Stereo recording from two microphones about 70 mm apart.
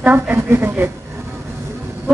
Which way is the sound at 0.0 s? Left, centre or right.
Right.